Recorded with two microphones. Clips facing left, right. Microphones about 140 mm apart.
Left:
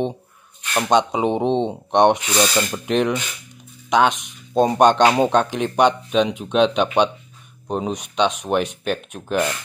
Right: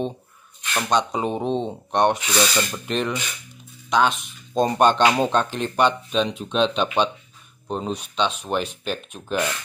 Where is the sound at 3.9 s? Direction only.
15° left (ahead or behind).